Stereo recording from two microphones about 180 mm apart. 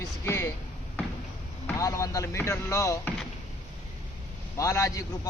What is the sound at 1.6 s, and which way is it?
A man's voice, 15° left (ahead or behind).